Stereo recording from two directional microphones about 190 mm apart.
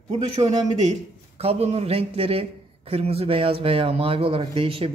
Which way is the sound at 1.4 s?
30° right (ahead or behind).